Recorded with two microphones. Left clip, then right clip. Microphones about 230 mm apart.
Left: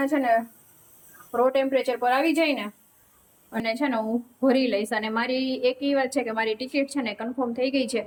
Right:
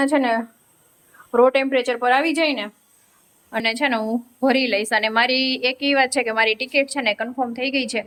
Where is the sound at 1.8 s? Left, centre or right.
Centre.